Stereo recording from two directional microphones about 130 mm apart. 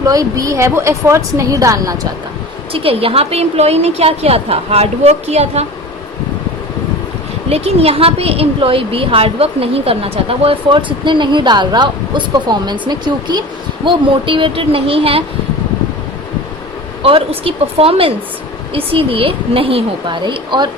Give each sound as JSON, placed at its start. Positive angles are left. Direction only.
{"t": 0.0, "sound": "a woman's voice", "side_deg": -25}
{"t": 2.7, "sound": "a woman's voice", "side_deg": -45}
{"t": 7.5, "sound": "a woman's voice", "side_deg": -50}
{"t": 17.0, "sound": "a woman's voice", "side_deg": -45}